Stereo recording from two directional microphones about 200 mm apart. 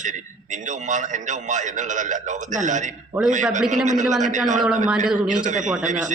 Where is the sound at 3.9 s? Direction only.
40° right (ahead or behind).